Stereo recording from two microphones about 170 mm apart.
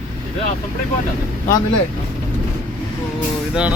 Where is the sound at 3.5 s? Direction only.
5° right (ahead or behind).